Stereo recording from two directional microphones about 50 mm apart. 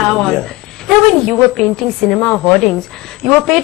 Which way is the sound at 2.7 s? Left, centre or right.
Centre.